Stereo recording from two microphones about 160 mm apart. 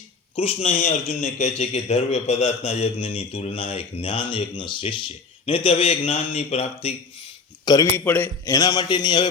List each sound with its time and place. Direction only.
0.3 s a man's voice: 40° left (ahead or behind)
7.6 s speech: 25° left (ahead or behind)
7.9 s a man's voice: 15° left (ahead or behind)